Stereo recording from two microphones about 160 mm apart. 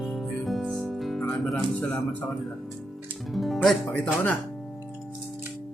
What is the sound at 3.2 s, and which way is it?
Speech, centre (ahead or behind).